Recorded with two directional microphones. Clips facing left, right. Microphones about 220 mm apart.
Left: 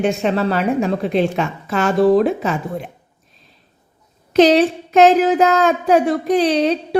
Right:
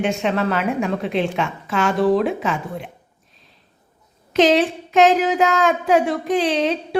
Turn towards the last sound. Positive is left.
turn(degrees=40)  # may be behind; listen again after turning